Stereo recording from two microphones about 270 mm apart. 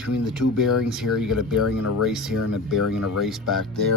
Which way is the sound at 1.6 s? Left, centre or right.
Left.